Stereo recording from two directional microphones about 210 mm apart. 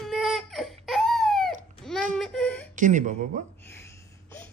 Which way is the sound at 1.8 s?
5° left (ahead or behind).